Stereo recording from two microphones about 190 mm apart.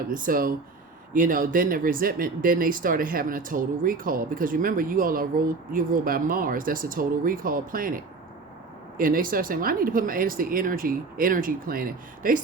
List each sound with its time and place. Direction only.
0.1 s speech: 45° right (ahead or behind)